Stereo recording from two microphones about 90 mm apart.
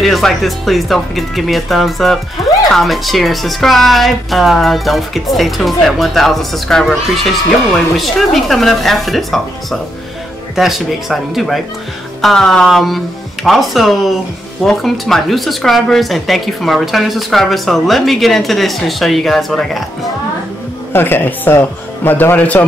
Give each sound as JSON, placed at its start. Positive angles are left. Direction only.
{"t": 0.0, "sound": "a woman's voice", "side_deg": 0}
{"t": 20.9, "sound": "speech", "side_deg": 25}